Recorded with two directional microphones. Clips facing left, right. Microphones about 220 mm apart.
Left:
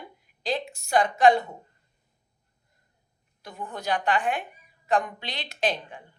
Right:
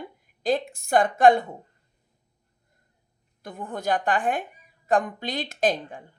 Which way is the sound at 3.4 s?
50° right (ahead or behind).